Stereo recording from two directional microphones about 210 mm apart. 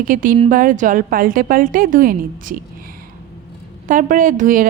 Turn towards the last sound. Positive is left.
turn(degrees=-40)  # may be behind; listen again after turning